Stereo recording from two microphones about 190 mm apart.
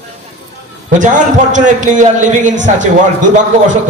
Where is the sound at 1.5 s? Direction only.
40° right (ahead or behind).